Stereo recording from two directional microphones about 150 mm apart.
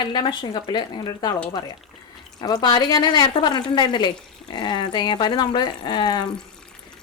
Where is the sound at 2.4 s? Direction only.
25° left (ahead or behind).